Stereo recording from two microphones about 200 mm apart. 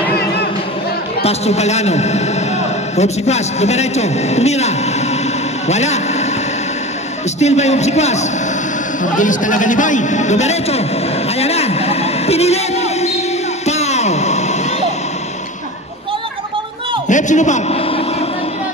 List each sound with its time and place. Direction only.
1.2 s a man's voice: 30° left (ahead or behind)
7.3 s a man's voice: 35° left (ahead or behind)
11.3 s a sound: 30° left (ahead or behind)
17.1 s a man's voice: 35° left (ahead or behind)